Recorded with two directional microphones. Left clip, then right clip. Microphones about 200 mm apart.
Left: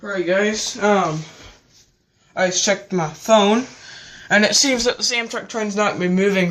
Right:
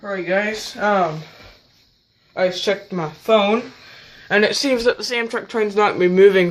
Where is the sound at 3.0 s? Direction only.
15° right (ahead or behind).